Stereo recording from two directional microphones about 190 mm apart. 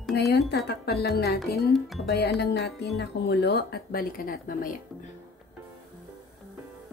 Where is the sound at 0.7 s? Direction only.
55° left (ahead or behind).